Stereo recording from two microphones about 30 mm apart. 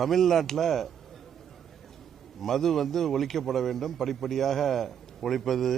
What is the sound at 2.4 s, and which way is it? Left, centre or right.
A man's voice, centre.